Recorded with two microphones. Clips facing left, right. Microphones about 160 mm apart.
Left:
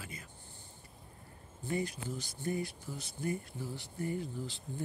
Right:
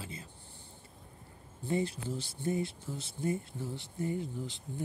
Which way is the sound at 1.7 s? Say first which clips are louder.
Right 3 dB; 25° right (ahead or behind).